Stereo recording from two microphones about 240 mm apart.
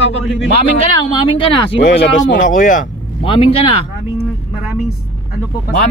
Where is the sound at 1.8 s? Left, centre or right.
Left.